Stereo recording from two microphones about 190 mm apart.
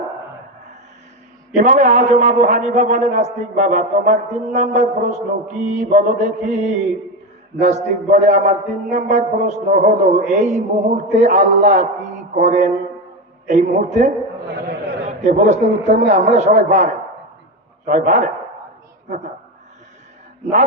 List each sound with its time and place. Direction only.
1.5 s a man's voice: 40° right (ahead or behind)
14.5 s a man's voice: 60° right (ahead or behind)
15.0 s a man's voice: 35° right (ahead or behind)